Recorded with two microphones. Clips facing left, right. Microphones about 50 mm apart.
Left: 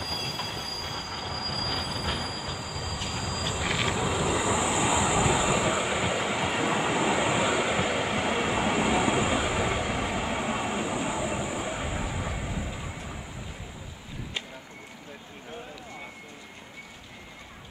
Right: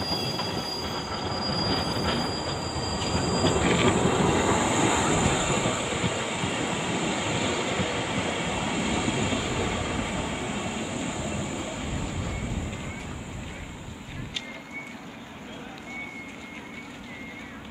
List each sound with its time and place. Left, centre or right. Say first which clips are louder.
0.0 s train wheels squealing: right 4 dB; centre
3.4 s train: right 6 dB; centre
6.8 s vehicle: left 3 dB; centre
10.5 s vehicle: left 2 dB; left; by 12.6 s centre